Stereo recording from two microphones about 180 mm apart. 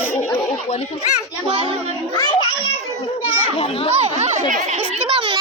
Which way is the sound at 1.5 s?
25° right (ahead or behind).